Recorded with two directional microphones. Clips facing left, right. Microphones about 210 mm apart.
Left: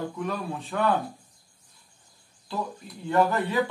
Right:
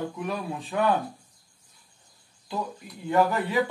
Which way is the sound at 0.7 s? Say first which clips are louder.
Right 1 dB; 15° right (ahead or behind).